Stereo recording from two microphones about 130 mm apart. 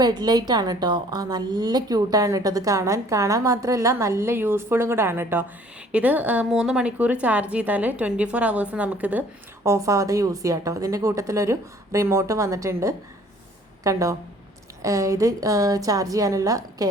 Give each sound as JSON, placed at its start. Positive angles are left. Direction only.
{"t": 0.0, "sound": "a woman's voice", "side_deg": -35}
{"t": 9.6, "sound": "a woman's voice", "side_deg": -25}